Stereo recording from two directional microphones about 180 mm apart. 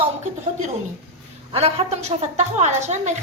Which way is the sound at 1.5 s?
35° right (ahead or behind).